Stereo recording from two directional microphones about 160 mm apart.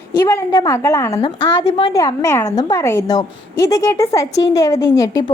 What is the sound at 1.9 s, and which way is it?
A woman's voice, 20° left (ahead or behind).